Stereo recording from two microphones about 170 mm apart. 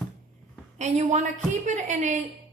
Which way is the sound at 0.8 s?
45° right (ahead or behind).